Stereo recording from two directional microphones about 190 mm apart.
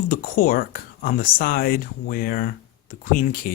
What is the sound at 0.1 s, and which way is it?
Speech, 45° left (ahead or behind).